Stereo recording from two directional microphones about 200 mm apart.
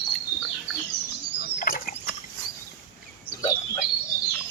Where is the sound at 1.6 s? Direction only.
45° left (ahead or behind).